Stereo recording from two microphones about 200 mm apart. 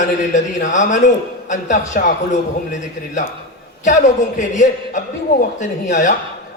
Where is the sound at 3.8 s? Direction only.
35° left (ahead or behind).